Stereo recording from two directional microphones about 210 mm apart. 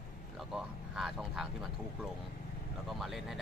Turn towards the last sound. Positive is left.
turn(degrees=0)  # may be behind; listen again after turning